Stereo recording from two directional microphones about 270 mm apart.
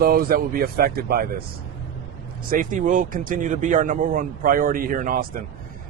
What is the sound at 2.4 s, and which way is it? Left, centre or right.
Speech, right.